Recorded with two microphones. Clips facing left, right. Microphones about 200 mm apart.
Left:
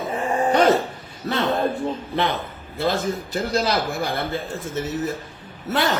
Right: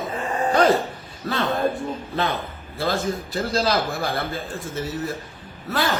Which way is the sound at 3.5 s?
20° left (ahead or behind).